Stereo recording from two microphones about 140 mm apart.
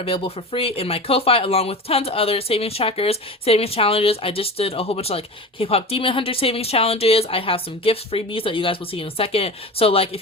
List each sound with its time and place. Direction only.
0.0 s speech: 40° left (ahead or behind)